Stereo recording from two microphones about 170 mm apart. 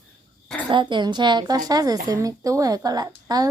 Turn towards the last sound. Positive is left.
turn(degrees=-20)  # may be behind; listen again after turning